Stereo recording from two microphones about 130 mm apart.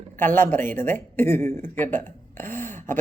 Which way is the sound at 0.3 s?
15° left (ahead or behind).